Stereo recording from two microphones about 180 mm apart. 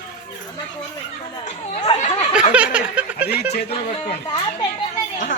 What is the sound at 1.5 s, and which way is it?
Speech, 35° left (ahead or behind).